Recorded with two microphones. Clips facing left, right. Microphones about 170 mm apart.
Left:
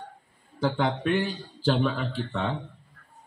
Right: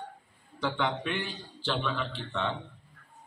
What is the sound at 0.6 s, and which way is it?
A man's voice, 40° left (ahead or behind).